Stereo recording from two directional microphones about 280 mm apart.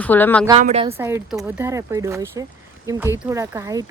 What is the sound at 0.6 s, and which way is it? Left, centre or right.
Speech, right.